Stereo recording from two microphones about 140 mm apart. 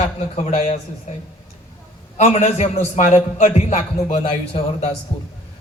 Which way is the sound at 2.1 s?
55° left (ahead or behind).